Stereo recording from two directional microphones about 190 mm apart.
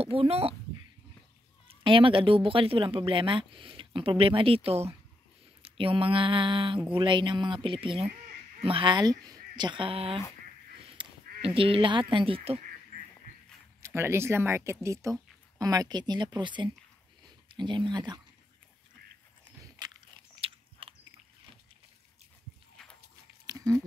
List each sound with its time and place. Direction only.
0.0 s speech: 30° right (ahead or behind)
1.7 s speech: 25° right (ahead or behind)
11.0 s a sound: 25° right (ahead or behind)
11.4 s speech: 30° right (ahead or behind)
13.8 s speech: 15° right (ahead or behind)
19.8 s biting: 20° right (ahead or behind)
22.8 s walk: 5° left (ahead or behind)
23.4 s a sound: 20° right (ahead or behind)